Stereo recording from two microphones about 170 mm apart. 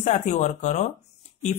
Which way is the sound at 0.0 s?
45° left (ahead or behind).